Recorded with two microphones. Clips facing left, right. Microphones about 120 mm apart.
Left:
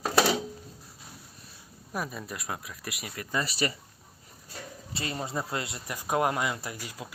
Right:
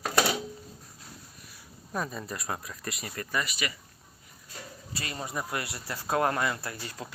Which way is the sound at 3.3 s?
30° left (ahead or behind).